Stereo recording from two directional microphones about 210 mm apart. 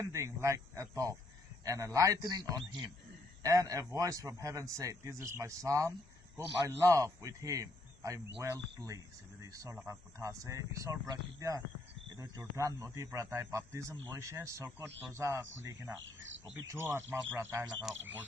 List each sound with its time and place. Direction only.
0.0 s a man's voice: 15° right (ahead or behind)
16.6 s a man's voice: 15° right (ahead or behind)